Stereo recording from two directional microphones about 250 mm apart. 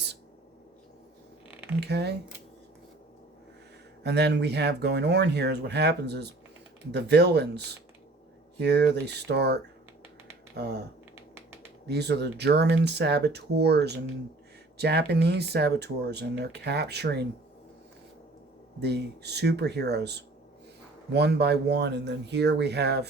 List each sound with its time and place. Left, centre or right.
1.8 s speech: right
4.0 s speech: right
11.9 s speech: right
18.8 s speech: right